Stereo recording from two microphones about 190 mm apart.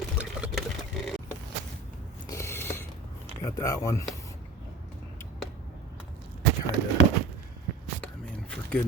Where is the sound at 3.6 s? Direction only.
15° left (ahead or behind).